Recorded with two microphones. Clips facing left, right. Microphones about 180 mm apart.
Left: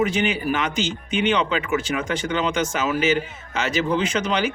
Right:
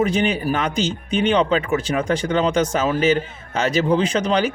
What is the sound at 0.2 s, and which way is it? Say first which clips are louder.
Speech: right 2 dB; 35° right (ahead or behind).